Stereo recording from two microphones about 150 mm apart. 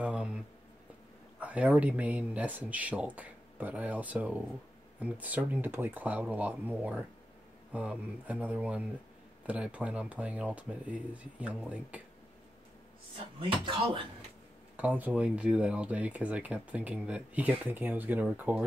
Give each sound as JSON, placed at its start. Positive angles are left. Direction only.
{"t": 0.0, "sound": "a sound", "side_deg": -5}
{"t": 1.4, "sound": "speech", "side_deg": -10}
{"t": 13.4, "sound": "speech", "side_deg": -35}
{"t": 14.8, "sound": "speech", "side_deg": -10}